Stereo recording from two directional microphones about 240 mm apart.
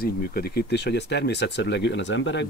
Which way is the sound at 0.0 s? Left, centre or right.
Left.